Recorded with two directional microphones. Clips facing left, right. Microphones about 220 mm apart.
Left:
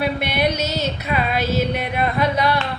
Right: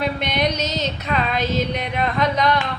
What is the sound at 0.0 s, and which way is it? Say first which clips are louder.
Female singing: left 1 dB; 5° left (ahead or behind).